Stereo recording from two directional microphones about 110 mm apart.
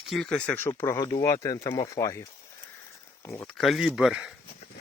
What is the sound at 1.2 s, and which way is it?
Speech, 30° left (ahead or behind).